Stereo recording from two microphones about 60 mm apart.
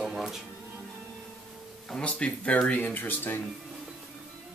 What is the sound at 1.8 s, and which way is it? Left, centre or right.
Speech, centre.